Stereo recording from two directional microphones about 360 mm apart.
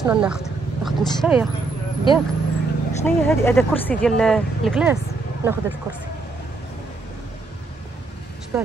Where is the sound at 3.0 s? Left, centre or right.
Centre.